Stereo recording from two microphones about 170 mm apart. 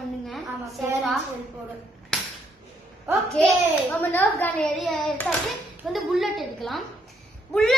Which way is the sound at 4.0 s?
10° left (ahead or behind).